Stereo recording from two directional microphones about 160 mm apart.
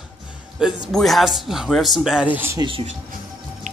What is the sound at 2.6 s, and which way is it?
Speech, 35° right (ahead or behind).